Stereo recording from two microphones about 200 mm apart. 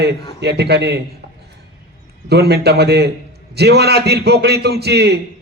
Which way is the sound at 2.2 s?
55° right (ahead or behind).